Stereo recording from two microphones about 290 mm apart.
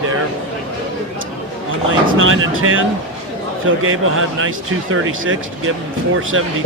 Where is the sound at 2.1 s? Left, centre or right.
Right.